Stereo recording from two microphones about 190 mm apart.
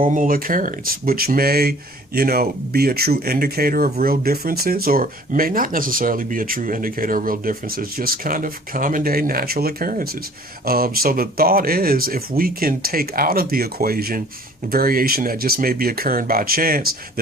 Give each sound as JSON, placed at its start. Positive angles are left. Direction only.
{"t": 0.0, "sound": "speech", "side_deg": -45}